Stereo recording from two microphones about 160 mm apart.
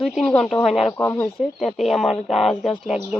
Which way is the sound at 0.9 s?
15° left (ahead or behind).